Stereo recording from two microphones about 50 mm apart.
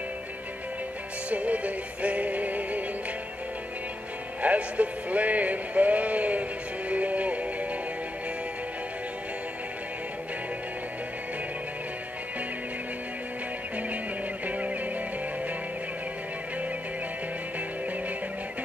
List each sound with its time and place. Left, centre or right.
1.3 s music: right
4.4 s speech: right
6.9 s music: right
14.4 s music: right